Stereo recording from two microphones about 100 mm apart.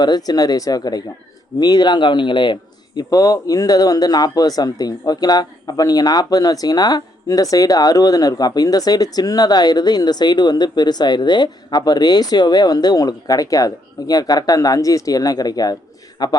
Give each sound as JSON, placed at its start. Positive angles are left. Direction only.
{"t": 0.0, "sound": "a man's voice", "side_deg": 40}